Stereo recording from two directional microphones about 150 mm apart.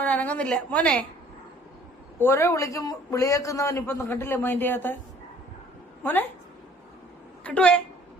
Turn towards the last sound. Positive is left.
turn(degrees=5)  # may be behind; listen again after turning